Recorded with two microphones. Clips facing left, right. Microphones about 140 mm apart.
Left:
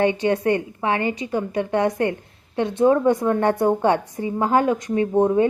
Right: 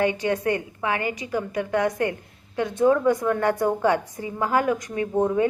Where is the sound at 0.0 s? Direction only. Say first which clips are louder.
Left 3 dB; 25° left (ahead or behind).